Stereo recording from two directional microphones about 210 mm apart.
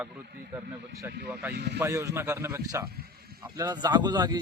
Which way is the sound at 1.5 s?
50° right (ahead or behind).